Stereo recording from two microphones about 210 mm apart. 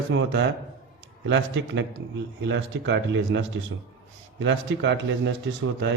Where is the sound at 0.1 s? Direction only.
60° right (ahead or behind).